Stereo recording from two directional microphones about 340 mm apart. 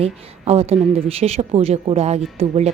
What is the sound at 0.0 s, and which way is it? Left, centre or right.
Speech, centre.